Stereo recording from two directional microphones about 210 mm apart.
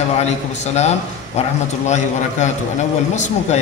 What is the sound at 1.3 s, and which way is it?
Speech, 30° left (ahead or behind).